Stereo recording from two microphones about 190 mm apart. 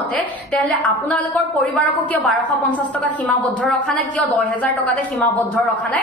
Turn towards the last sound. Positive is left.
turn(degrees=10)  # may be behind; listen again after turning